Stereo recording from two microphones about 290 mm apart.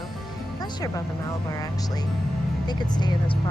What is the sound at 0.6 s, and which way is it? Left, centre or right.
Speech, centre.